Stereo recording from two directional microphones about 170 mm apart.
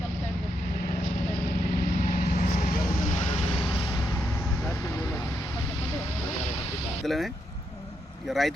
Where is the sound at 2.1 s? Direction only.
50° left (ahead or behind); by 3.8 s 30° left (ahead or behind).